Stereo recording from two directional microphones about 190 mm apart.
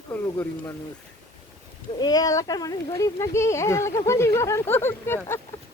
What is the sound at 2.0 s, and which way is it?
Speech, 20° left (ahead or behind).